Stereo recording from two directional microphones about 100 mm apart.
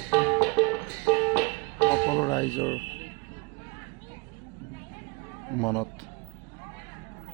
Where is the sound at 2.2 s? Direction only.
35° left (ahead or behind).